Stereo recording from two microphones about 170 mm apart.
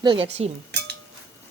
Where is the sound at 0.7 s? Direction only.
85° right.